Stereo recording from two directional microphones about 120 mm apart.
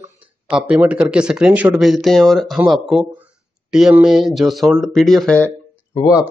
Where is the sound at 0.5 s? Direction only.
10° right (ahead or behind).